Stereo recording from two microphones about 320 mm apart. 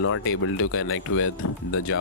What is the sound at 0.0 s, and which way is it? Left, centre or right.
Speech, left.